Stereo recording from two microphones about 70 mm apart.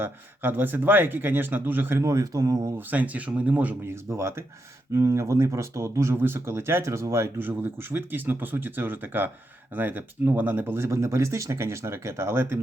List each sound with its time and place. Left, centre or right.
0.0 s speech: right
2.0 s speech: right
2.7 s speech: right
3.8 s speech: right
6.1 s speech: right
7.3 s speech: right
10.8 s speech: right